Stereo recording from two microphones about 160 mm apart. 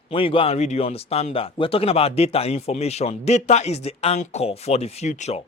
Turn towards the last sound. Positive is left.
turn(degrees=45)  # may be behind; listen again after turning